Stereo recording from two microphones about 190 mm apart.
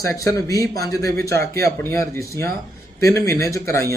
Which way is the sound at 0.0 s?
15° left (ahead or behind).